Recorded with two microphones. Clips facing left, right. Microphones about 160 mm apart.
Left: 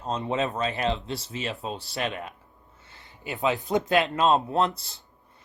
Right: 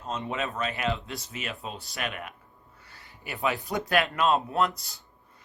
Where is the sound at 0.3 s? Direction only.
20° left (ahead or behind).